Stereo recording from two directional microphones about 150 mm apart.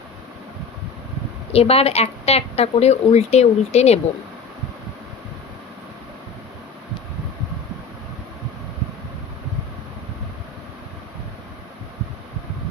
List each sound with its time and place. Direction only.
1.5 s speech: 40° left (ahead or behind)